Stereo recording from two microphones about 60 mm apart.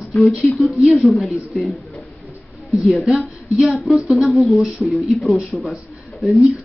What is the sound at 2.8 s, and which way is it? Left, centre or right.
Speech, centre.